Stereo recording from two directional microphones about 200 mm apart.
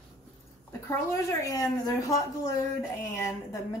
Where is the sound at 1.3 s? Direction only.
15° left (ahead or behind).